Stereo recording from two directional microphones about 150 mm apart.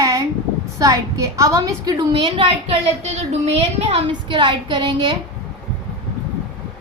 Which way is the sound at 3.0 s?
45° right (ahead or behind).